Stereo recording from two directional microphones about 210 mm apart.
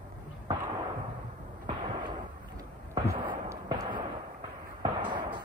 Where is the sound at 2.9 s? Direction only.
15° right (ahead or behind).